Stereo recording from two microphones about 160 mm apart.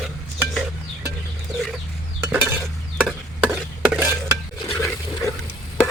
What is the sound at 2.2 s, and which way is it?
Dishes, 15° right (ahead or behind).